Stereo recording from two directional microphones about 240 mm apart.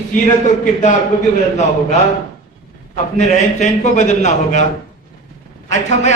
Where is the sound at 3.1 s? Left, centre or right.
Left.